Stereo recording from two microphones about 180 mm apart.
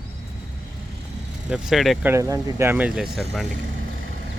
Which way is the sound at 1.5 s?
Centre (ahead or behind).